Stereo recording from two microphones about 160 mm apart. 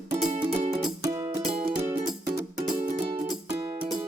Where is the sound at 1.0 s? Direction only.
20° right (ahead or behind).